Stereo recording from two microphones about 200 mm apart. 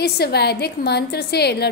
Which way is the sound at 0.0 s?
55° left (ahead or behind).